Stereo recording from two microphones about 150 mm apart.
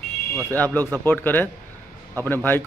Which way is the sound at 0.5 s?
10° left (ahead or behind).